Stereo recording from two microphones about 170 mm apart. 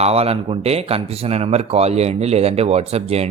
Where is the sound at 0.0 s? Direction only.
35° right (ahead or behind).